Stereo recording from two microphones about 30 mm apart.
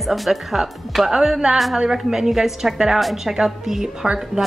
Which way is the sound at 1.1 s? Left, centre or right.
Centre.